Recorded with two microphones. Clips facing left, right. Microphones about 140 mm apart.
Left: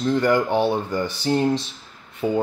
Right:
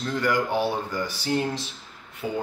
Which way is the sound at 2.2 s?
55° left (ahead or behind).